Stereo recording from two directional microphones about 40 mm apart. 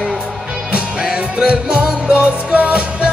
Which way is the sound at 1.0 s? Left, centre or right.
Centre.